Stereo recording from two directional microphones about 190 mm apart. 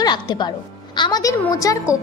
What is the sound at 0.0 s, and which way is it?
A woman's voice, 25° left (ahead or behind).